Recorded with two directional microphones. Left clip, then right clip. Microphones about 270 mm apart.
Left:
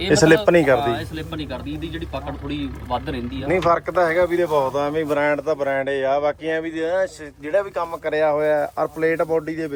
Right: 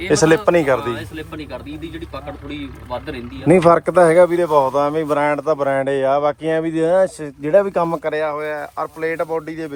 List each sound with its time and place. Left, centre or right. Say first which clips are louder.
0.1 s speech: right 1 dB; centre
3.4 s speech: right 6 dB; right
4.1 s speech: right 6 dB; centre
7.6 s speech: right 7 dB; right
8.1 s speech: left 3 dB; centre